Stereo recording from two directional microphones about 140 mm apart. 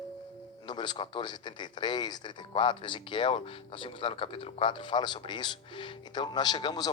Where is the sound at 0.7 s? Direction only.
30° left (ahead or behind).